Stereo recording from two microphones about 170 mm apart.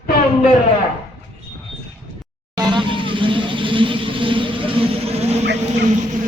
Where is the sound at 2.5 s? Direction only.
25° right (ahead or behind).